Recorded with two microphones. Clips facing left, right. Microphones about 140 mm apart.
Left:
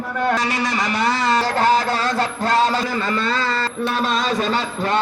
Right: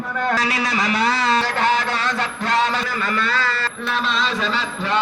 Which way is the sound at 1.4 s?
35° left (ahead or behind).